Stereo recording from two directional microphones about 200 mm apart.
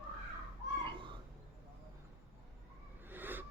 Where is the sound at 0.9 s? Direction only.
25° right (ahead or behind).